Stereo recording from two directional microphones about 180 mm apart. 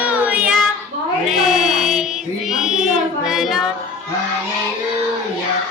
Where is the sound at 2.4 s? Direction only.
Centre (ahead or behind).